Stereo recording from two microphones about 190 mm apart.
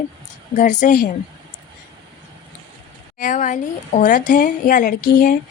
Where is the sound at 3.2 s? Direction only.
40° left (ahead or behind).